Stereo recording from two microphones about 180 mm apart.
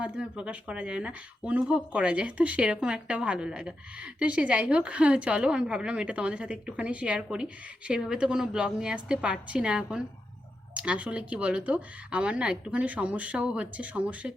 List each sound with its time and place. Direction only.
0.0 s speech: 5° right (ahead or behind)